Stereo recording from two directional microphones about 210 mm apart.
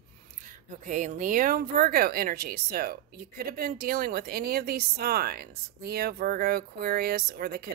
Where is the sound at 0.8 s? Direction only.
40° right (ahead or behind).